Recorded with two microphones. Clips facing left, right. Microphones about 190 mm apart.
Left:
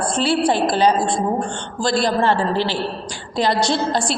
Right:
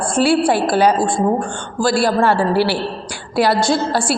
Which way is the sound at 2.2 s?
10° right (ahead or behind).